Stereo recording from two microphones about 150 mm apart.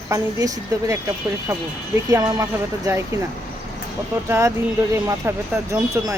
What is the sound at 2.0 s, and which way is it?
Speech, 20° right (ahead or behind).